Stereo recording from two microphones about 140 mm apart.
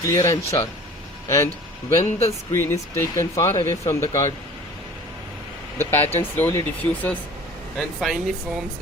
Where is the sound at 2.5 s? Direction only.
20° left (ahead or behind).